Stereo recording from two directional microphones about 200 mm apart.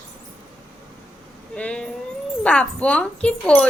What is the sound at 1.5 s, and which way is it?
Speech, 5° left (ahead or behind).